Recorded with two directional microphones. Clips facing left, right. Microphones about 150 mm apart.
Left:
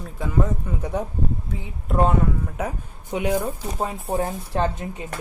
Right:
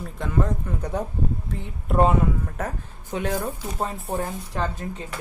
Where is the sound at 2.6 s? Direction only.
10° left (ahead or behind).